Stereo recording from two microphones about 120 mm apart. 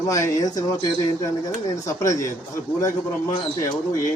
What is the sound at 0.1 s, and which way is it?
Speech, 30° left (ahead or behind).